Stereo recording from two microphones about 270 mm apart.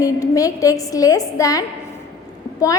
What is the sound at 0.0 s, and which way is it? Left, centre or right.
A woman's voice, centre.